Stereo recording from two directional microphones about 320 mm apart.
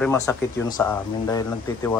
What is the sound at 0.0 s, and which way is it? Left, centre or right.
Speech, centre.